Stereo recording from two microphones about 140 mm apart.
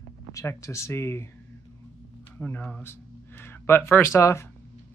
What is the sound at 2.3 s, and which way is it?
Speech, 15° left (ahead or behind).